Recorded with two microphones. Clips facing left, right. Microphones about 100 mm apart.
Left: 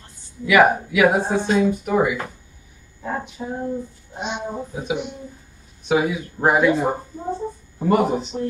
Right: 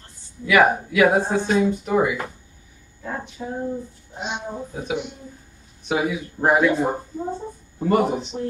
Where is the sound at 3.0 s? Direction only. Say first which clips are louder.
Left 3 dB; 20° left (ahead or behind).